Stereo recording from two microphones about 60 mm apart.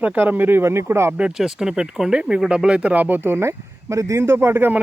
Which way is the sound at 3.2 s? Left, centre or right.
Right.